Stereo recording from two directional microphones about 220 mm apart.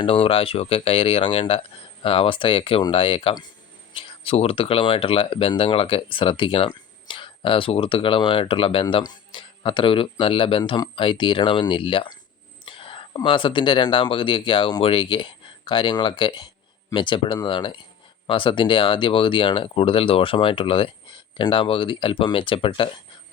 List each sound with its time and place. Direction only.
0.0 s speech: 25° left (ahead or behind)